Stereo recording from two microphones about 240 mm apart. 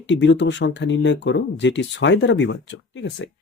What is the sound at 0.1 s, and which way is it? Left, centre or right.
Speech, left.